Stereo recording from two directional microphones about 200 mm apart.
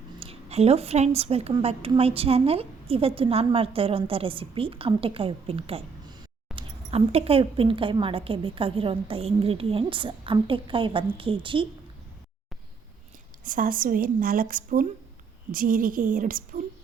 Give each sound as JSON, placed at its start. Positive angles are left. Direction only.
{"t": 0.2, "sound": "a woman's voice", "side_deg": -30}
{"t": 13.4, "sound": "speech", "side_deg": -45}